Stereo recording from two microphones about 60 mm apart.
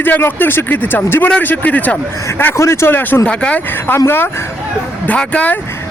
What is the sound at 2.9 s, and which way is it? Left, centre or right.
Speech, left.